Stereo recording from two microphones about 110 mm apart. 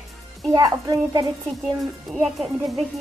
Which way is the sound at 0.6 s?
35° right (ahead or behind).